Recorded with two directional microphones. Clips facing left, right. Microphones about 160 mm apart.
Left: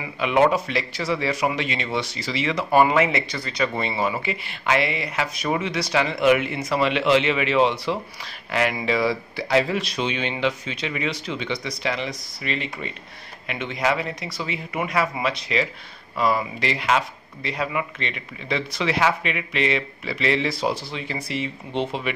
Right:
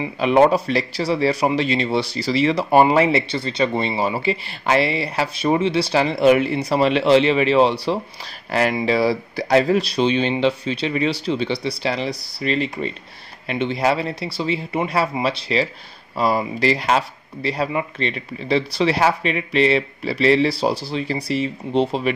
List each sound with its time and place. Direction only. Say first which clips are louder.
0.0 s speech: right 4 dB; 35° right (ahead or behind)